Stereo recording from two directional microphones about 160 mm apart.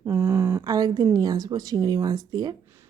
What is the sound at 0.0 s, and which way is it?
A woman's voice, 20° right (ahead or behind).